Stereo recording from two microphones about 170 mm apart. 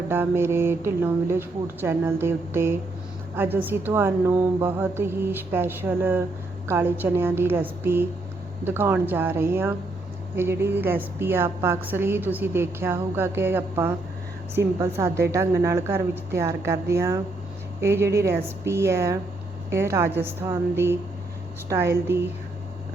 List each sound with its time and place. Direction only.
0.1 s speech: 15° right (ahead or behind)